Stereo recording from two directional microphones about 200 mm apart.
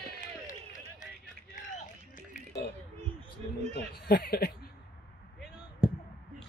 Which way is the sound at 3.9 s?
50° left (ahead or behind).